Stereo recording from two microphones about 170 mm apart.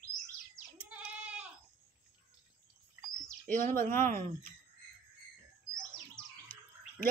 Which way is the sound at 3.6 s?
50° right (ahead or behind).